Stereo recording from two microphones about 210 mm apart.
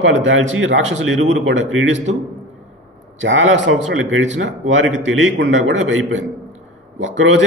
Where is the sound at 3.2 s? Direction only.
65° right (ahead or behind).